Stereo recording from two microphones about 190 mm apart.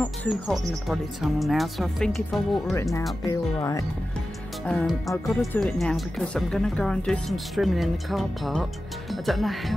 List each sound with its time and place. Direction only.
0.3 s speech: centre (ahead or behind)
2.7 s speech: 15° left (ahead or behind)
4.6 s speech: 5° left (ahead or behind)